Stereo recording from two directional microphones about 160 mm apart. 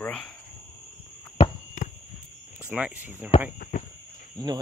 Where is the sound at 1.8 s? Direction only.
55° left (ahead or behind).